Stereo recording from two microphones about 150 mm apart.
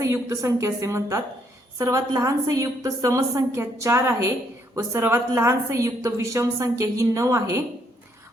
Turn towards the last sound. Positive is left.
turn(degrees=-20)  # may be behind; listen again after turning